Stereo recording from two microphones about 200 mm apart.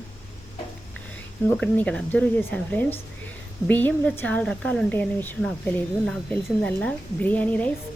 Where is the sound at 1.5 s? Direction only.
5° left (ahead or behind).